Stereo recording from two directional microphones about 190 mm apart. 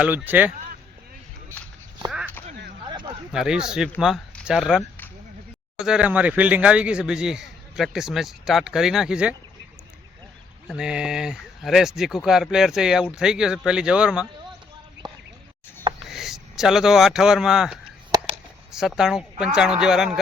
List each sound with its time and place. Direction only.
0.0 s speech: 10° right (ahead or behind)
2.0 s a sound: 5° right (ahead or behind)
3.3 s a man's voice: 5° right (ahead or behind)
5.8 s a man's voice: 5° right (ahead or behind)
10.7 s a man's voice: 5° right (ahead or behind)
15.0 s a sound: 25° right (ahead or behind)
16.0 s speech: centre (ahead or behind)
18.1 s a sound: 20° right (ahead or behind)
18.7 s a woman's voice: centre (ahead or behind)